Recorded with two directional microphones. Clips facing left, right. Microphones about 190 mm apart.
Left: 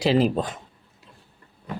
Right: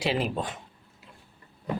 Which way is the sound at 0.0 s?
35° left (ahead or behind).